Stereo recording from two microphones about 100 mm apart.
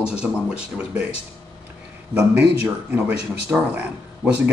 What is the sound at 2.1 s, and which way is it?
Speech, 15° right (ahead or behind).